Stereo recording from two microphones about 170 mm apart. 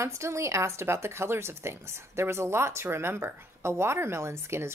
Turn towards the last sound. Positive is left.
turn(degrees=-15)  # may be behind; listen again after turning